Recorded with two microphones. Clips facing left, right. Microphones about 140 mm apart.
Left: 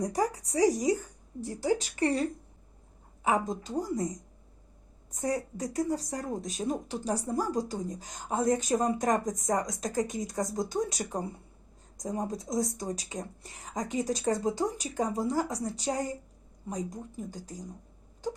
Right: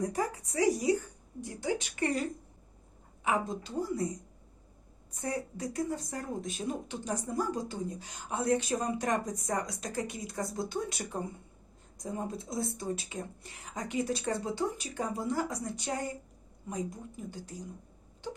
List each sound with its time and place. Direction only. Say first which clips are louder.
0.0 s speech: left 3 dB; 35° left (ahead or behind)
3.2 s speech: left 3 dB; 40° left (ahead or behind)
5.1 s speech: left 4 dB; 40° left (ahead or behind)